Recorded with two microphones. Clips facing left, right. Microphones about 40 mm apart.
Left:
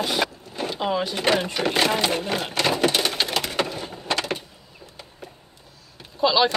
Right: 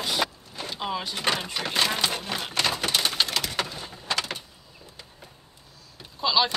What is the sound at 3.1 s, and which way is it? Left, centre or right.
Wood, left.